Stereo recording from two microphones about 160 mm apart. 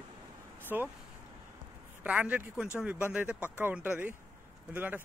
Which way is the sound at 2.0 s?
10° right (ahead or behind).